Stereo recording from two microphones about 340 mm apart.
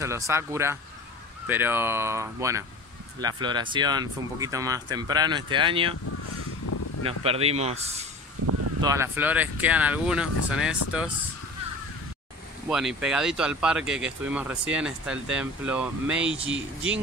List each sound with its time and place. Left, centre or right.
0.0 s speech: centre
6.7 s a sound: left
7.1 s speech: centre
8.4 s a sound: right
8.8 s speech: centre
12.6 s speech: centre